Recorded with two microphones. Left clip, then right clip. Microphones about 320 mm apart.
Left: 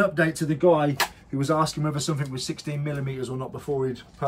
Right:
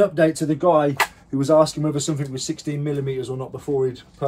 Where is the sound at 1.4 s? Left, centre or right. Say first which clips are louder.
Right 8 dB; centre.